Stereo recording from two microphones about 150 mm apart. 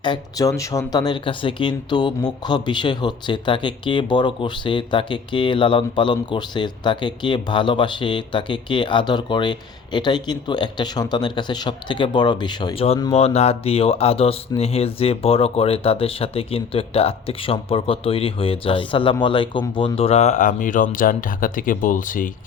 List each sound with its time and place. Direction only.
0.0 s speech: 25° left (ahead or behind); by 22.3 s 60° left (ahead or behind)